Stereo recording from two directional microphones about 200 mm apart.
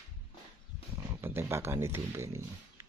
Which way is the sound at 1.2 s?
10° right (ahead or behind).